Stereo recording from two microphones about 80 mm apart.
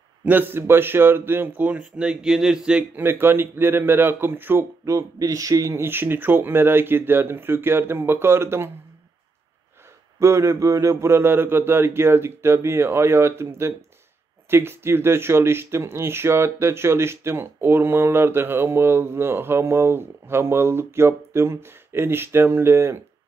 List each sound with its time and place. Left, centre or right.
0.2 s speech: right
3.0 s speech: right
4.8 s speech: right
10.1 s speech: right